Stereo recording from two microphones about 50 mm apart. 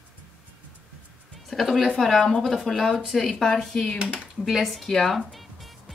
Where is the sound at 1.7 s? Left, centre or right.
Centre.